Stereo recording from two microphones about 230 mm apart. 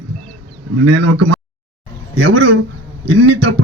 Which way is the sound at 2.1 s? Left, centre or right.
Right.